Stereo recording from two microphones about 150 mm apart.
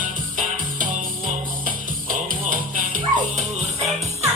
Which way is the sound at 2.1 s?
65° right (ahead or behind).